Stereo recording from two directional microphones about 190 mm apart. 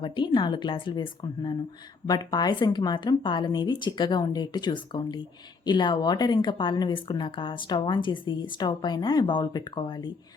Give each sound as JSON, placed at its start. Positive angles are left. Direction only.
{"t": 0.0, "sound": "a woman's voice", "side_deg": 25}